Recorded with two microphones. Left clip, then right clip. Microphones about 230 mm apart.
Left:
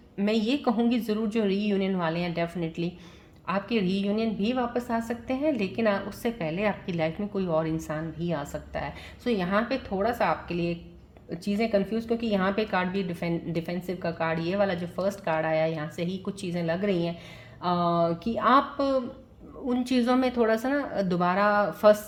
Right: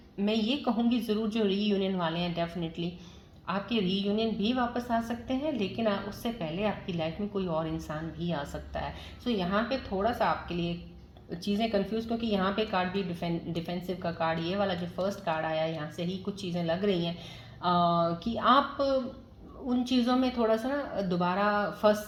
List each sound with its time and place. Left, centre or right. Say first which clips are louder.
0.2 s a woman's voice: left 3 dB; left